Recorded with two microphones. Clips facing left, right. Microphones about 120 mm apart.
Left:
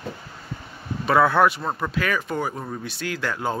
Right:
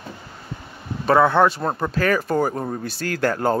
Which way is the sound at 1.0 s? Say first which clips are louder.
Right 2 dB; 25° right (ahead or behind).